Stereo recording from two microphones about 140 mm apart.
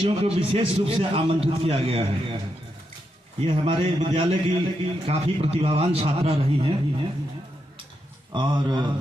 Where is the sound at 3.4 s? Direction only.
40° right (ahead or behind).